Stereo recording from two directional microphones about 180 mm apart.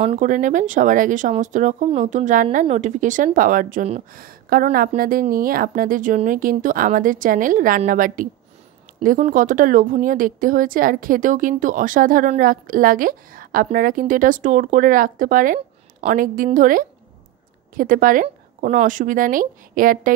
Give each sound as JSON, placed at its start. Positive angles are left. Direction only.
{"t": 0.0, "sound": "speech", "side_deg": -40}
{"t": 4.2, "sound": "speech", "side_deg": -55}